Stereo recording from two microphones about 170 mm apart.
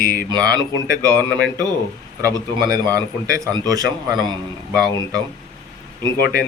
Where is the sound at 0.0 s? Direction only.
50° left (ahead or behind).